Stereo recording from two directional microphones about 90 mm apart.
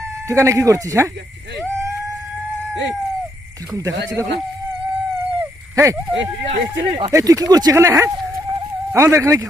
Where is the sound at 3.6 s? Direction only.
35° right (ahead or behind).